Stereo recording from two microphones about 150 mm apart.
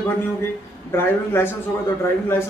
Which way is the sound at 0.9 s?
15° left (ahead or behind).